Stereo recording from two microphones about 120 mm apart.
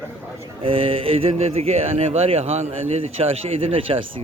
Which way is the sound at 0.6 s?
50° right (ahead or behind).